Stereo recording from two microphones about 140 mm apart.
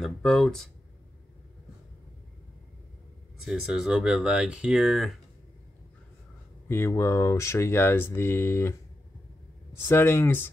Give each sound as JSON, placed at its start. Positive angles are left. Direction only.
{"t": 0.0, "sound": "speech", "side_deg": 0}
{"t": 3.4, "sound": "speech", "side_deg": -5}
{"t": 6.7, "sound": "speech", "side_deg": 20}
{"t": 9.8, "sound": "speech", "side_deg": 15}